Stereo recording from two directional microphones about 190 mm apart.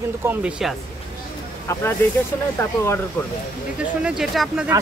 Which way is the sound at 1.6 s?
15° left (ahead or behind).